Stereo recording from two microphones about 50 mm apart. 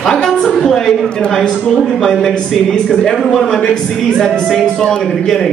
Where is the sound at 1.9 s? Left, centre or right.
Centre.